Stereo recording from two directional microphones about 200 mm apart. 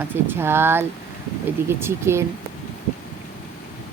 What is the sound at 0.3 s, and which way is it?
Speech, 10° right (ahead or behind).